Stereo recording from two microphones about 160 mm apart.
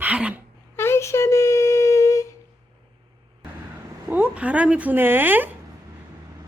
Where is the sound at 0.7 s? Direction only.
15° left (ahead or behind).